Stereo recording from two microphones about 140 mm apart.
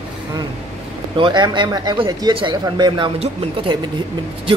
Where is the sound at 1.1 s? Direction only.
35° right (ahead or behind).